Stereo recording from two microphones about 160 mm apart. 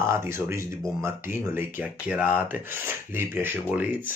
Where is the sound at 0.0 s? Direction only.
15° right (ahead or behind).